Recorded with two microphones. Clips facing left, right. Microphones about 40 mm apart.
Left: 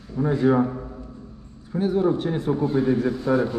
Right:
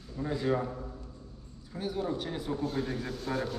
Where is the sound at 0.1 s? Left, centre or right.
Left.